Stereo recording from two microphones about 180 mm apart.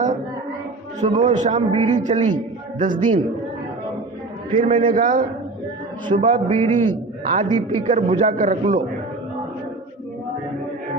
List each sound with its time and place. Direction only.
1.0 s a man's voice: 35° right (ahead or behind)
3.0 s a man's voice: 35° right (ahead or behind)
4.5 s a man's voice: 40° right (ahead or behind)
6.1 s a man's voice: 30° right (ahead or behind)